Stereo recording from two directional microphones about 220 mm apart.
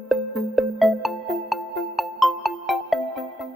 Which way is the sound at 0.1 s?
Centre (ahead or behind).